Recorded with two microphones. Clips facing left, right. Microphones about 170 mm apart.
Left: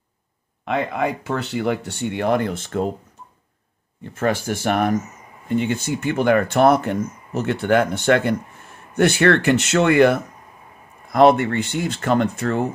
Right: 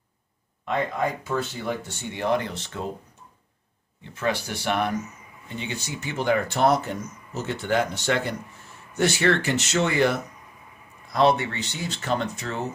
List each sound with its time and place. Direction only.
0.7 s speech: 75° left (ahead or behind); by 2.9 s 50° left (ahead or behind)
4.0 s speech: 50° left (ahead or behind)